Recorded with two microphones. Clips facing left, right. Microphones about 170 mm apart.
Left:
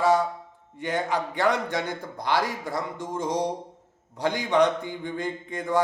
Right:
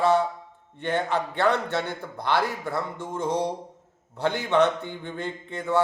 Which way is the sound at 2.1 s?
55° right (ahead or behind).